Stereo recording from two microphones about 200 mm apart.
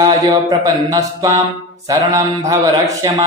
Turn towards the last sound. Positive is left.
turn(degrees=-15)  # may be behind; listen again after turning